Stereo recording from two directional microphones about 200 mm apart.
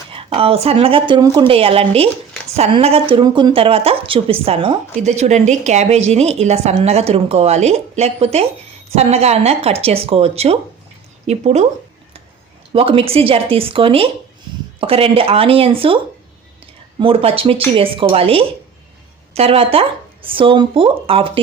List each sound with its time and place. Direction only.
0.1 s a woman's voice: 30° right (ahead or behind)
12.7 s a woman's voice: 30° right (ahead or behind)
17.0 s a woman's voice: 25° right (ahead or behind)